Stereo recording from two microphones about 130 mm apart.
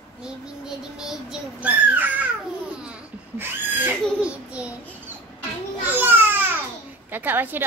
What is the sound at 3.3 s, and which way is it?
Babbling, 15° right (ahead or behind).